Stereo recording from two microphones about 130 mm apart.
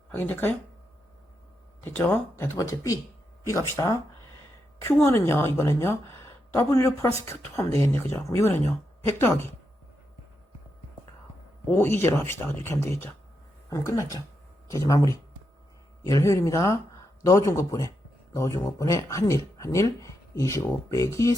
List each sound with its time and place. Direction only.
0.1 s speech: 15° left (ahead or behind)
1.8 s speech: 15° left (ahead or behind)
2.6 s speech: 25° left (ahead or behind)
5.0 s speech: 20° left (ahead or behind)
11.7 s speech: 20° left (ahead or behind)